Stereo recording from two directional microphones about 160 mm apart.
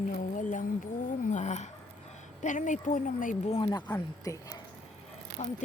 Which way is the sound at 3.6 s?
25° left (ahead or behind).